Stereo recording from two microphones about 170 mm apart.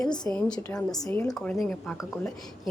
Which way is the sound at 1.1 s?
5° left (ahead or behind).